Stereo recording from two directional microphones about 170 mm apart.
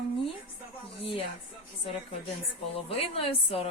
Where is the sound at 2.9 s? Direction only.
35° left (ahead or behind).